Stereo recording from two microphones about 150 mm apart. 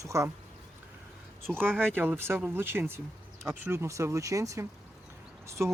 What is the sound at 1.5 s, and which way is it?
Speech, 5° right (ahead or behind).